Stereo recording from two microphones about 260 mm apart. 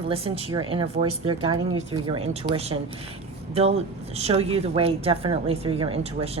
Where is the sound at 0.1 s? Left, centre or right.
Right.